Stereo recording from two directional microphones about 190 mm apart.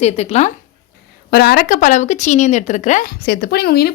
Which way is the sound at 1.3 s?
55° left (ahead or behind).